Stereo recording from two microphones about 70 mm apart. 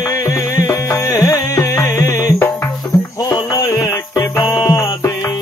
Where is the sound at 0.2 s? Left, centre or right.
Left.